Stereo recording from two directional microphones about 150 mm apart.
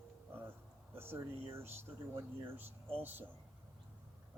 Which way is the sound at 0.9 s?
15° right (ahead or behind).